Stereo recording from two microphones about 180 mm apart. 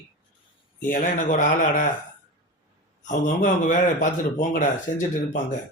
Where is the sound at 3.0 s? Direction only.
45° left (ahead or behind).